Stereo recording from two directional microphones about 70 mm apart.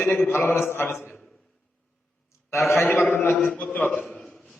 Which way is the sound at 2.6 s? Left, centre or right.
Left.